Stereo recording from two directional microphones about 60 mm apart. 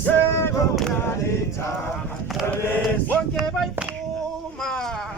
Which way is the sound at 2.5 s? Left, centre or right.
Left.